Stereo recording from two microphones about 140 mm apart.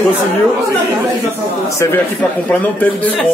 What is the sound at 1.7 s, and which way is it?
Speech, 20° left (ahead or behind).